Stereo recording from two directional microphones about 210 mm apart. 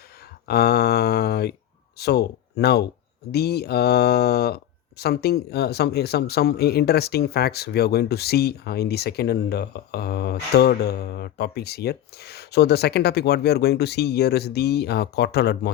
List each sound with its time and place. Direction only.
0.4 s speech: 50° left (ahead or behind)